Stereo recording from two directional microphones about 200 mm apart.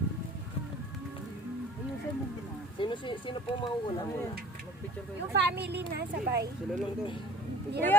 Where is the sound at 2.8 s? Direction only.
25° left (ahead or behind).